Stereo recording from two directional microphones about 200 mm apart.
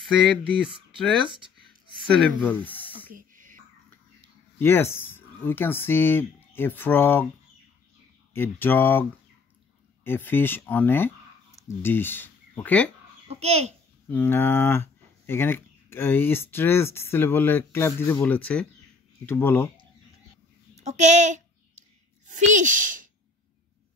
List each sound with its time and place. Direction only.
2.1 s speech: 5° left (ahead or behind)
3.1 s a sound: 40° right (ahead or behind)
4.6 s speech: 10° left (ahead or behind)
8.3 s speech: 10° left (ahead or behind)
10.0 s speech: 10° left (ahead or behind)
13.3 s a child's voice: 30° right (ahead or behind)
14.0 s speech: 10° left (ahead or behind)
20.7 s a sound: 35° right (ahead or behind)
22.5 s a child's voice: 40° right (ahead or behind)